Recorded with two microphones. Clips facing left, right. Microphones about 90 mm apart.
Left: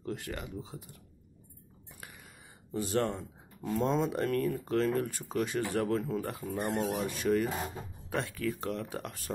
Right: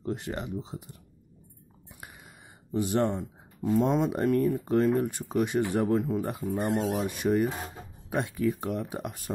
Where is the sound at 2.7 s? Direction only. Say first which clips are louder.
Right 4 dB; 20° right (ahead or behind).